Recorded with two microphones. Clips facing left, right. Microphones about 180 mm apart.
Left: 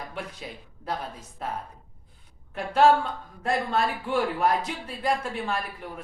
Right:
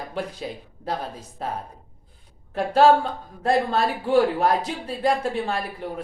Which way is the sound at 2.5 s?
35° right (ahead or behind).